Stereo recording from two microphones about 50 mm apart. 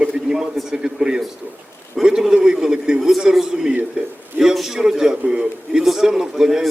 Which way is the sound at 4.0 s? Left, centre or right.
Right.